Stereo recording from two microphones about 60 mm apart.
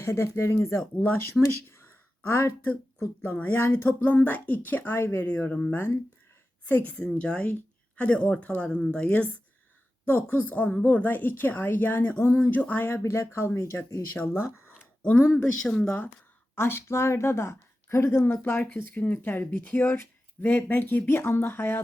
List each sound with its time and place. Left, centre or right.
0.0 s speech: left
1.4 s speech: centre
1.7 s a sound: left
3.2 s speech: left
4.9 s a woman's voice: left
5.5 s a woman's voice: centre
5.7 s speech: left
6.9 s a woman's voice: centre
10.1 s speech: left
13.0 s a woman's voice: left
15.6 s a woman's voice: centre
16.6 s a woman's voice: left
18.8 s speech: left